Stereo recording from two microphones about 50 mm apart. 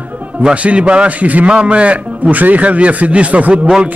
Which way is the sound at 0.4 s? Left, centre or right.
Right.